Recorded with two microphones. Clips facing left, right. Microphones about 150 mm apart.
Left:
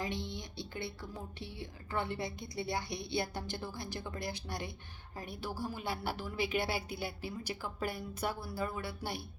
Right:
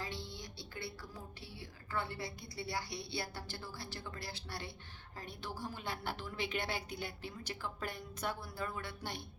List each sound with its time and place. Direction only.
0.0 s a woman's voice: 20° left (ahead or behind)